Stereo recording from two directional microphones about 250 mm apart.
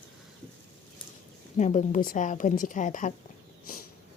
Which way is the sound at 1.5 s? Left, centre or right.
Left.